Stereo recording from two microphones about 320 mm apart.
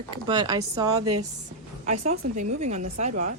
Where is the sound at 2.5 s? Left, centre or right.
Right.